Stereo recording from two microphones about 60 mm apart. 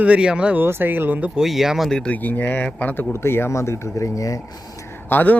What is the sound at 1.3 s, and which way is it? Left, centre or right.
Speech, centre.